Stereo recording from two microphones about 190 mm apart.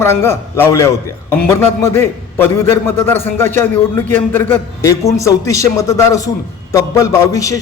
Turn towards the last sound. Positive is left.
turn(degrees=15)  # may be behind; listen again after turning